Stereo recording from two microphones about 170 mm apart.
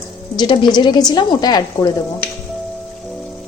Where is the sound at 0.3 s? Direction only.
25° left (ahead or behind).